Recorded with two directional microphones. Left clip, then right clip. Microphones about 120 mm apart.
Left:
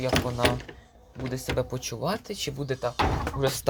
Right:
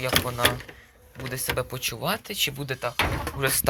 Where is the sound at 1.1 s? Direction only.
20° left (ahead or behind).